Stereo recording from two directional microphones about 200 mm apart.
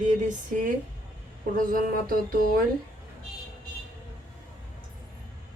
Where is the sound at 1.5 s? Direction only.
45° right (ahead or behind).